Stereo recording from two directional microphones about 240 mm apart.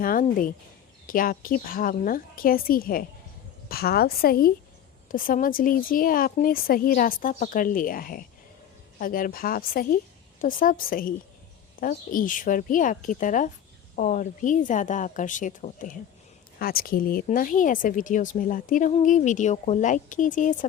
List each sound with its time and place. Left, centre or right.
0.0 s speech: left